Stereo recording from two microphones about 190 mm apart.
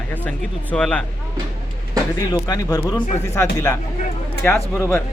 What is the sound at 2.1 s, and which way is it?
Speech, 20° left (ahead or behind).